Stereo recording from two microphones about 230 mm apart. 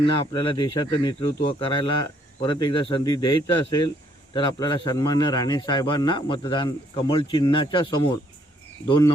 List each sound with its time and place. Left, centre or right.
0.0 s speech: left